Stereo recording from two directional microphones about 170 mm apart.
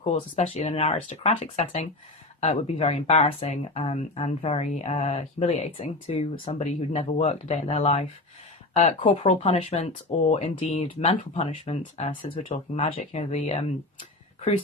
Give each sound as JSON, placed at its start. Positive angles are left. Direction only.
{"t": 0.0, "sound": "speech", "side_deg": 40}